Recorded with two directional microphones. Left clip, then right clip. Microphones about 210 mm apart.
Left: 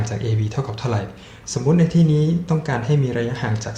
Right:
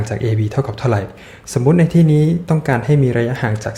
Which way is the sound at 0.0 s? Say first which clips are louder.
Right 6 dB; 35° right (ahead or behind).